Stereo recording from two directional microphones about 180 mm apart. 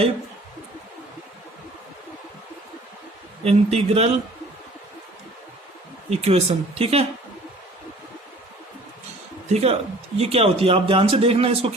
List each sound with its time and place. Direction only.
3.4 s speech: 35° right (ahead or behind)
6.1 s speech: 35° right (ahead or behind)
9.5 s speech: 35° right (ahead or behind)